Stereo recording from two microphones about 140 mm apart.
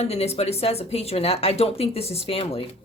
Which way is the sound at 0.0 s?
50° left (ahead or behind).